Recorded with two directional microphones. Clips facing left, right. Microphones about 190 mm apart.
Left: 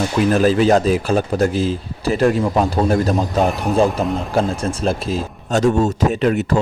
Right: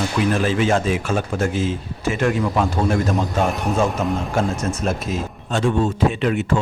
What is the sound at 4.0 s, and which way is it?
Speech, 35° left (ahead or behind).